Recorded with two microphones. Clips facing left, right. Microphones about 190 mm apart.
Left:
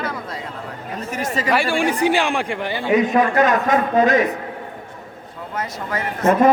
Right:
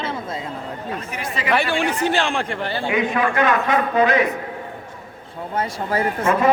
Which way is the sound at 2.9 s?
40° left (ahead or behind).